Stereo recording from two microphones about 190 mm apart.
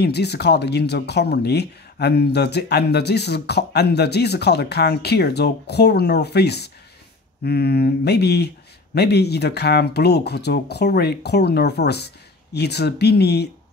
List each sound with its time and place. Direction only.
0.0 s speech: 60° left (ahead or behind)